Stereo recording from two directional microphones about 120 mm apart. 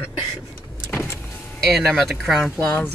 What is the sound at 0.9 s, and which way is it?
Vehicle, 20° left (ahead or behind).